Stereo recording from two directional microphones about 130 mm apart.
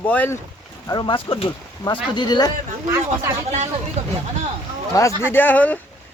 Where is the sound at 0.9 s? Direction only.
35° left (ahead or behind).